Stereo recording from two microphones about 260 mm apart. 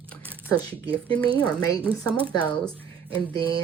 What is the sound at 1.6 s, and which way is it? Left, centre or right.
Speech, centre.